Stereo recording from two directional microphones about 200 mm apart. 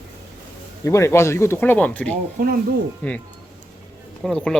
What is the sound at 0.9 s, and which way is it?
A man's voice, 15° left (ahead or behind).